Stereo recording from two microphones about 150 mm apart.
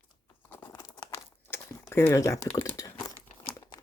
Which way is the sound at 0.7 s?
25° left (ahead or behind).